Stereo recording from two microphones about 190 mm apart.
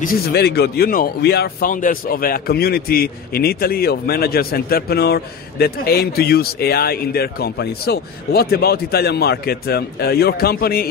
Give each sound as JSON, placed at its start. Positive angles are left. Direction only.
{"t": 0.0, "sound": "speech", "side_deg": 50}